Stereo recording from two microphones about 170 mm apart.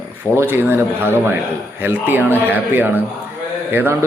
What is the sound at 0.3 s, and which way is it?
Speech, 15° right (ahead or behind).